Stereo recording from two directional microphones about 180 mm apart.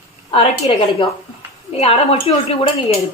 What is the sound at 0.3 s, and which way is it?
Speech, 30° left (ahead or behind).